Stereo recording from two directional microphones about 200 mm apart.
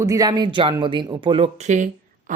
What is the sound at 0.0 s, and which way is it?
Speech, 20° right (ahead or behind).